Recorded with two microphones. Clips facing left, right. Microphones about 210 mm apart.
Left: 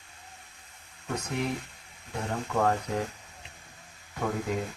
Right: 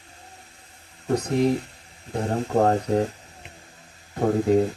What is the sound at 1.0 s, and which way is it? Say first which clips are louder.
Speech: right 10 dB; 35° right (ahead or behind).